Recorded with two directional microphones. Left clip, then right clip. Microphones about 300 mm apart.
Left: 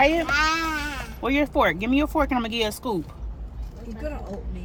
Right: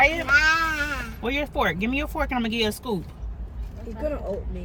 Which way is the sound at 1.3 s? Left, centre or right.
Centre.